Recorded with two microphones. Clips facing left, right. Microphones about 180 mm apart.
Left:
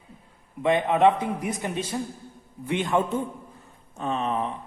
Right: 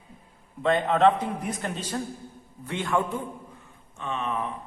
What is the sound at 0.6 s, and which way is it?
A man's voice, 10° left (ahead or behind).